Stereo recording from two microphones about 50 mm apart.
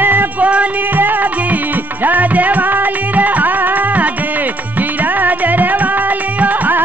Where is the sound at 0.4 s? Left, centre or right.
Right.